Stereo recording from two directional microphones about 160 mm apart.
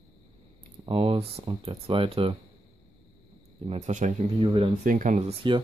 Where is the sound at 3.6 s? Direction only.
45° right (ahead or behind).